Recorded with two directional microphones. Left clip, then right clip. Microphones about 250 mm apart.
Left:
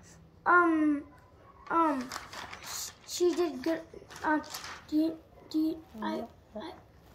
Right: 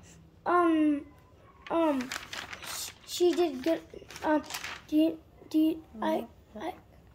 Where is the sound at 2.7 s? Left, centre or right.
Centre.